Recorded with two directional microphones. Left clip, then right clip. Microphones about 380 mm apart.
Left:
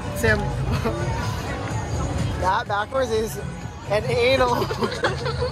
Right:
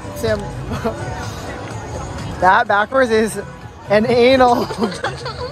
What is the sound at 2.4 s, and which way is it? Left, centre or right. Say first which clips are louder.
Speech: right 10 dB; right.